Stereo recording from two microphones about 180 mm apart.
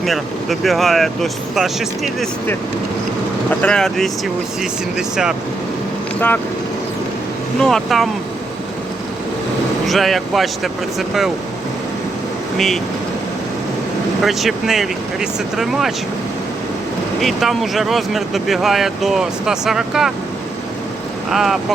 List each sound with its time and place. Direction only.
0.0 s speech: centre (ahead or behind)
3.6 s speech: 5° left (ahead or behind)
6.1 s speech: 10° left (ahead or behind)
7.6 s speech: centre (ahead or behind)
9.8 s speech: centre (ahead or behind)
12.5 s speech: centre (ahead or behind)
14.2 s speech: centre (ahead or behind)
17.2 s speech: centre (ahead or behind)
21.2 s speech: centre (ahead or behind)